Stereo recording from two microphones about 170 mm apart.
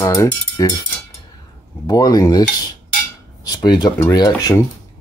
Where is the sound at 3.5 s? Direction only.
25° left (ahead or behind).